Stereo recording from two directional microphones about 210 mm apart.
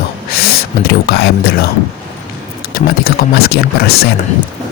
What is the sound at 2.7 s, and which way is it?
Beatboxing, 45° left (ahead or behind).